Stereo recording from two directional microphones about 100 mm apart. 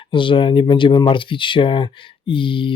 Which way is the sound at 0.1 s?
55° left (ahead or behind).